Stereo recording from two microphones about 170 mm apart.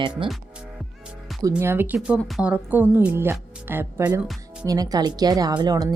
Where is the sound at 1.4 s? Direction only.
20° right (ahead or behind).